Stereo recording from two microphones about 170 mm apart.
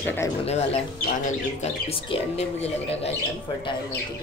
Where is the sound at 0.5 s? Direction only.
40° left (ahead or behind).